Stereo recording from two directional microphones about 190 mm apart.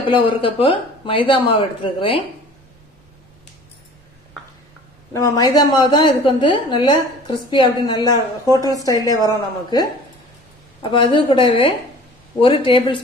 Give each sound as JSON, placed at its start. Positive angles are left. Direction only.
{"t": 0.1, "sound": "a woman's voice", "side_deg": 25}
{"t": 5.1, "sound": "a woman's voice", "side_deg": 15}